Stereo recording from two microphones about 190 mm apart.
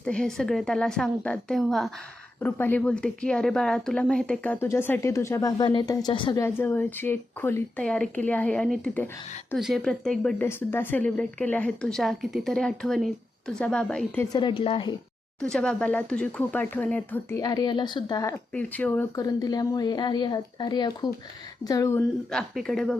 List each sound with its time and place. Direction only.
0.0 s a woman's voice: 5° left (ahead or behind)
14.3 s speech: 25° left (ahead or behind)
15.4 s a woman's voice: 5° left (ahead or behind)
19.2 s a woman's voice: 20° left (ahead or behind)
22.3 s speech: centre (ahead or behind)